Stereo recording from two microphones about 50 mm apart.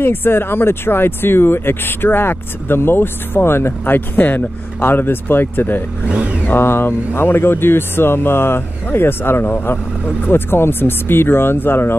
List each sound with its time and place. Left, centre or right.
0.0 s speech: left
6.0 s speech: right
6.4 s speech: left